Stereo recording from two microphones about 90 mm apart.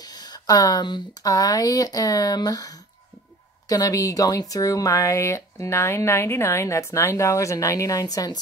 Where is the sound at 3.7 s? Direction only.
40° left (ahead or behind).